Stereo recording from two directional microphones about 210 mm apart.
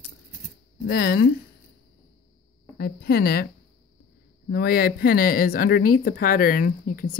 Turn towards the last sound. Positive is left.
turn(degrees=40)  # may be behind; listen again after turning